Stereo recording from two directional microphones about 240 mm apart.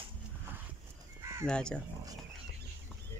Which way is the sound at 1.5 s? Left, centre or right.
Centre.